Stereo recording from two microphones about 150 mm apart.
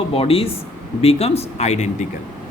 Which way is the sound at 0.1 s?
40° left (ahead or behind).